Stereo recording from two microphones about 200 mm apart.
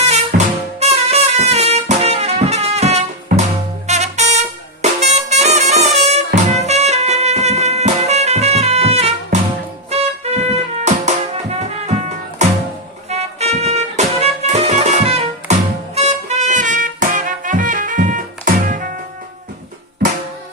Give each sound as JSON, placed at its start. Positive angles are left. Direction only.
{"t": 0.0, "sound": "music", "side_deg": -35}